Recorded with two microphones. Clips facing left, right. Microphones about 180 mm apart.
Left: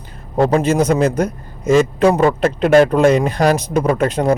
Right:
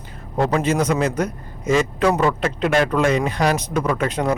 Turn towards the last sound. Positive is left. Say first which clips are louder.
# left 5 dB
turn(degrees=40)  # may be behind; listen again after turning